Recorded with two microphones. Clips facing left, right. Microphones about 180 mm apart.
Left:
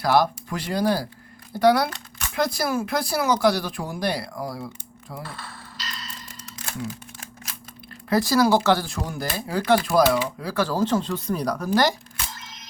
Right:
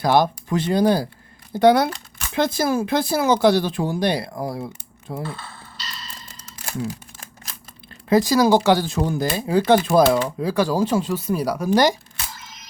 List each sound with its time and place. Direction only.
0.0 s speech: 20° right (ahead or behind)
8.1 s speech: 15° right (ahead or behind)
12.3 s a sound: centre (ahead or behind)